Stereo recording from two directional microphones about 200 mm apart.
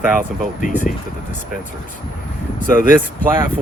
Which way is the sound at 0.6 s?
40° left (ahead or behind).